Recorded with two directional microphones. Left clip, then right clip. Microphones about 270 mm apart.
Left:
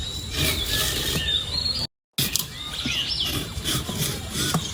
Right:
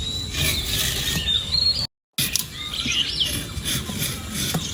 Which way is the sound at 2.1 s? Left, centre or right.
Right.